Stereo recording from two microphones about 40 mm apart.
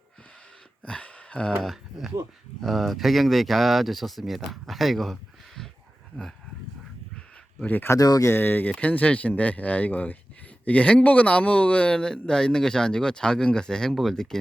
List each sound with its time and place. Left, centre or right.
0.9 s a sound: left
1.6 s speech: centre
7.9 s speech: left
8.3 s speech: left
8.8 s speech: left
11.9 s speech: left
13.9 s speech: centre